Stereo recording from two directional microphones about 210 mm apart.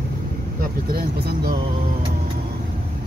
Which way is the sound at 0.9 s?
50° right (ahead or behind).